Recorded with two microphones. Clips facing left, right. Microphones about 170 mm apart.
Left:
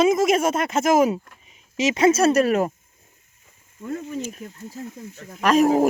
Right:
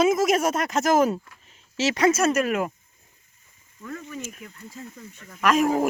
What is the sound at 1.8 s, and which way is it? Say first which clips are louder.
Speech: left 3 dB; 20° left (ahead or behind).